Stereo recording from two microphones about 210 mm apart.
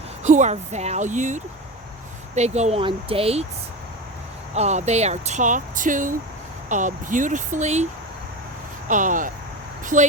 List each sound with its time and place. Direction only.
0.3 s speech: 35° right (ahead or behind)
4.5 s speech: 30° right (ahead or behind)
8.9 s speech: 40° right (ahead or behind)